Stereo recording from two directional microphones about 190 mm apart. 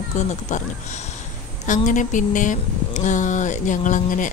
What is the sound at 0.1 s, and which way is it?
Speech, 40° left (ahead or behind).